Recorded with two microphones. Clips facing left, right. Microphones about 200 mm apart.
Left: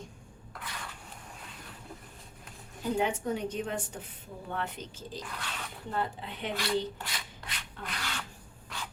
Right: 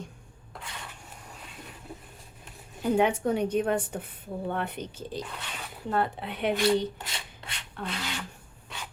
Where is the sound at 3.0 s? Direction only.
65° right (ahead or behind).